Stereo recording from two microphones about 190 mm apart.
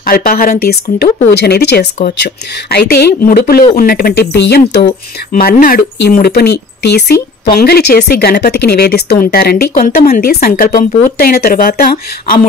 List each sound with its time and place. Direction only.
0.0 s speech: 50° left (ahead or behind)
5.3 s speech: 50° left (ahead or behind)